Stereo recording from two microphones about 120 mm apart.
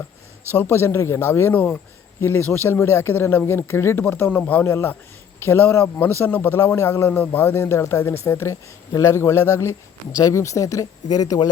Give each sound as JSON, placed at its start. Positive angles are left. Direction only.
{"t": 0.5, "sound": "speech", "side_deg": 20}